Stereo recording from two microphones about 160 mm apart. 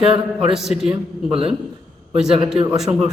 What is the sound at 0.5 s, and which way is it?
Speech, centre (ahead or behind).